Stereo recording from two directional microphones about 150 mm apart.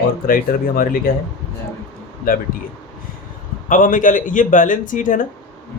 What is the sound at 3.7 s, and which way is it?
Speech, 60° left (ahead or behind).